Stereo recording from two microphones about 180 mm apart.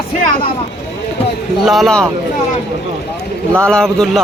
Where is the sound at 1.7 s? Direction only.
Centre (ahead or behind).